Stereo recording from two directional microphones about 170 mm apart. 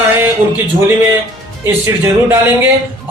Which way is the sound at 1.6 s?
15° right (ahead or behind).